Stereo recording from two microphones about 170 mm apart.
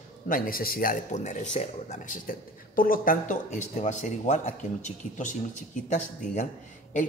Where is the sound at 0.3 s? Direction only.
60° left (ahead or behind).